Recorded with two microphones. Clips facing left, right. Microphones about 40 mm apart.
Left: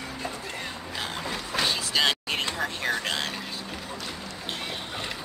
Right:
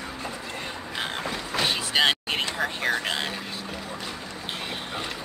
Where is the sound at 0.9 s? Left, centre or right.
Right.